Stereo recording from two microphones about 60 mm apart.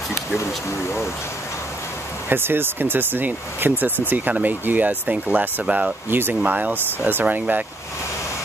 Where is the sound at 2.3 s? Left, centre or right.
Right.